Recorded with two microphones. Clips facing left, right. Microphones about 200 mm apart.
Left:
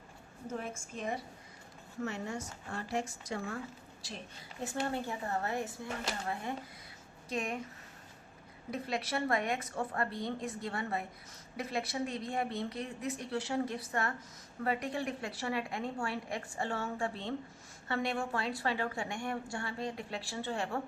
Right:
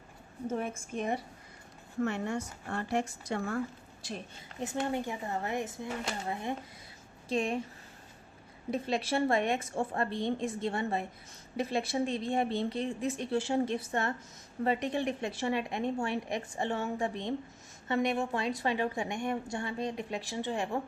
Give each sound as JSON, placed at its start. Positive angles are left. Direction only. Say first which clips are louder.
{"t": 0.6, "sound": "a woman's voice", "louder": "right 5 dB", "side_deg": -60}
{"t": 4.6, "sound": "speech", "louder": "right 3 dB", "side_deg": -20}
{"t": 7.3, "sound": "a woman's voice", "louder": "right 6 dB", "side_deg": -30}
{"t": 8.7, "sound": "a woman's voice", "louder": "right 5 dB", "side_deg": -25}